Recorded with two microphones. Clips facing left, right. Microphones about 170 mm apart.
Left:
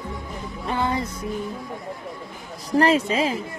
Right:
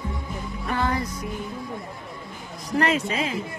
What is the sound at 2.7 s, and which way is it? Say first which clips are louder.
Speech: left 4 dB; 35° left (ahead or behind).